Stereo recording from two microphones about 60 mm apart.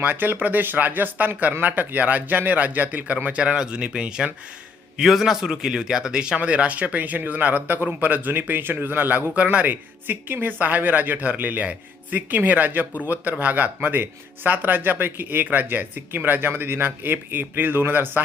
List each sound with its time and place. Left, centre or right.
0.0 s a man's voice: right